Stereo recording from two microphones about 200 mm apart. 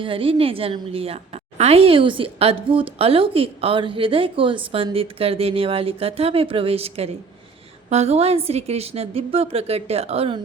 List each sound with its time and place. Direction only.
0.0 s a woman's voice: 25° right (ahead or behind)